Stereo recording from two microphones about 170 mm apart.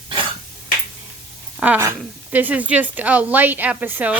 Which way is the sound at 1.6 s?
10° right (ahead or behind).